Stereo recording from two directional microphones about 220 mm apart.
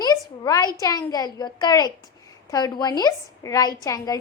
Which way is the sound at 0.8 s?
15° left (ahead or behind).